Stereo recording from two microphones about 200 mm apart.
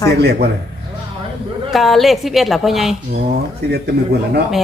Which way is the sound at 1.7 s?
Centre (ahead or behind).